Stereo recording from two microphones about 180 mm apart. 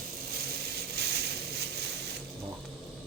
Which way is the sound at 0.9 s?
65° right (ahead or behind).